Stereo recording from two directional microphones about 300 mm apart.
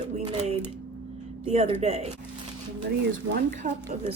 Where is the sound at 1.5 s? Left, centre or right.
Right.